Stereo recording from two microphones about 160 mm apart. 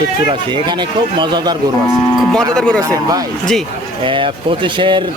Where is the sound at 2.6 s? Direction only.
5° left (ahead or behind).